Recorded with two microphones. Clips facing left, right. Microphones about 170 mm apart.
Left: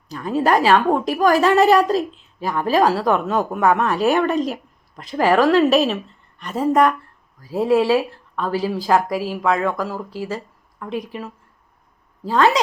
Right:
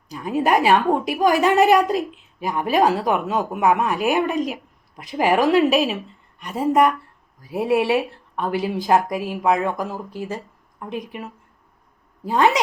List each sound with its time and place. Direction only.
0.1 s a woman's voice: 10° right (ahead or behind)